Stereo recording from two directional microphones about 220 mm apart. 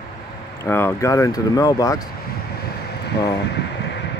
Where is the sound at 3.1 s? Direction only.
50° left (ahead or behind).